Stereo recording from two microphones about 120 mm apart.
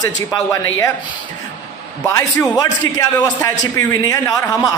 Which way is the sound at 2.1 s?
25° left (ahead or behind).